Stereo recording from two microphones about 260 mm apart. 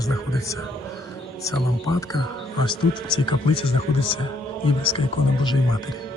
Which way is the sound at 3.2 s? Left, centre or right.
Centre.